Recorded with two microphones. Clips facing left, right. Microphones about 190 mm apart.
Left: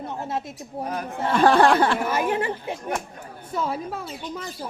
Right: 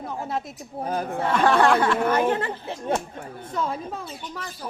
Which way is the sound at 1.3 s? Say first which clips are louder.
Left 2 dB; 35° left (ahead or behind).